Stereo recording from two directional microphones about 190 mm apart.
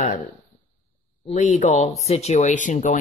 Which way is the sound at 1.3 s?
35° left (ahead or behind).